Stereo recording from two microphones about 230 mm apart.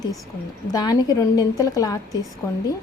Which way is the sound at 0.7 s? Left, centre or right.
Centre.